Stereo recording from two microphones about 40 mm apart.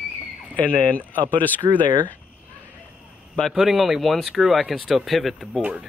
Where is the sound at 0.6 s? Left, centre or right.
Left.